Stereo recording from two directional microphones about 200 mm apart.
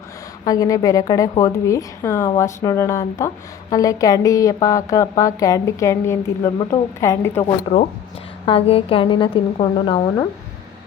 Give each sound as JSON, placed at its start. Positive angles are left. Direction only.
{"t": 0.4, "sound": "a woman's voice", "side_deg": 20}
{"t": 7.4, "sound": "speech", "side_deg": 35}